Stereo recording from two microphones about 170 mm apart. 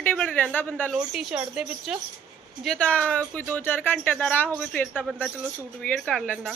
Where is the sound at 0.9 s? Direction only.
Centre (ahead or behind).